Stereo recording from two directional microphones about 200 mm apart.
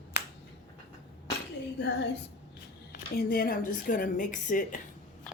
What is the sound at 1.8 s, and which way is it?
Speech, 60° left (ahead or behind).